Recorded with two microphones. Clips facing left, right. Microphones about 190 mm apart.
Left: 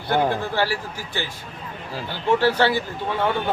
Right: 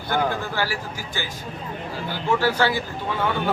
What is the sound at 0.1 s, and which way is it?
A man's voice, 25° left (ahead or behind).